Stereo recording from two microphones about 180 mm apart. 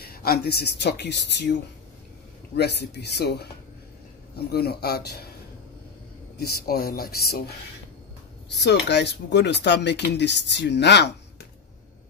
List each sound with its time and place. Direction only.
0.0 s speech: 55° left (ahead or behind)
2.5 s speech: 65° left (ahead or behind)
4.5 s speech: 60° left (ahead or behind)
6.3 s speech: 60° left (ahead or behind)
8.5 s speech: 70° left (ahead or behind)